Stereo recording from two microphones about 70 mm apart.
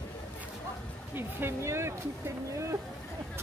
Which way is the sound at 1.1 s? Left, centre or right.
Right.